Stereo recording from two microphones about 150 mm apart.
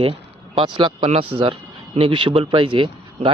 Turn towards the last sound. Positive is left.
turn(degrees=-35)  # may be behind; listen again after turning